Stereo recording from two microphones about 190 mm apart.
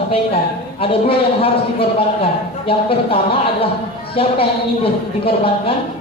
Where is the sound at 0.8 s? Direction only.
30° left (ahead or behind).